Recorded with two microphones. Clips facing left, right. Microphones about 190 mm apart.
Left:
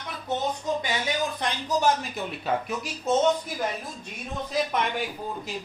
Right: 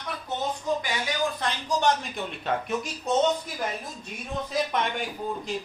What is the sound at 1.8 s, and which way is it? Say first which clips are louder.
Speech: even; 5° left (ahead or behind).